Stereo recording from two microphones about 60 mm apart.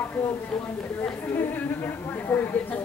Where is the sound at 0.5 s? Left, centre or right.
Centre.